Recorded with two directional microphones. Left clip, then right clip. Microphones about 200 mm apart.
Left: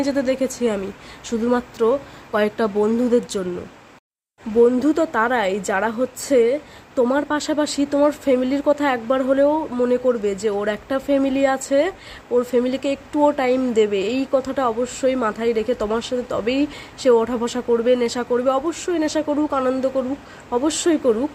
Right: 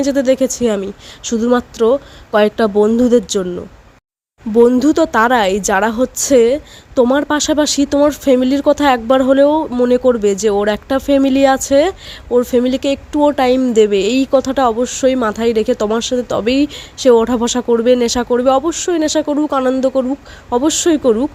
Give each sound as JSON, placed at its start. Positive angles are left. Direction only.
{"t": 0.0, "sound": "a woman's voice", "side_deg": -45}
{"t": 4.6, "sound": "a woman's voice", "side_deg": -50}